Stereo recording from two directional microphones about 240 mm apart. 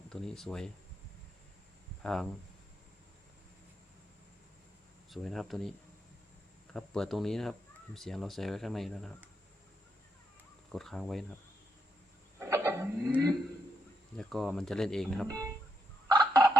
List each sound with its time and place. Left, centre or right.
0.1 s speech: centre
2.0 s speech: centre
5.1 s speech: centre
6.7 s speech: centre
10.7 s speech: centre
12.4 s a sound: centre
14.2 s speech: centre
16.0 s fowl: centre